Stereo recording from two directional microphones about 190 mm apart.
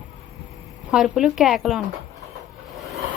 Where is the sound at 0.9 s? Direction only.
Centre (ahead or behind).